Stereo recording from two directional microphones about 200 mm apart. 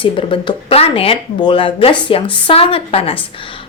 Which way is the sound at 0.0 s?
25° left (ahead or behind).